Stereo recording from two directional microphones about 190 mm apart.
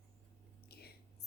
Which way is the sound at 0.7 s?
55° left (ahead or behind).